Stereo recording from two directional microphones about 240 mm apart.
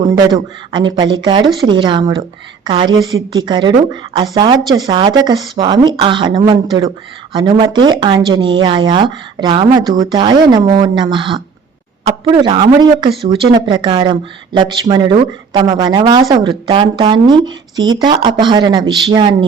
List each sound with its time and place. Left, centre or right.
0.7 s speech: centre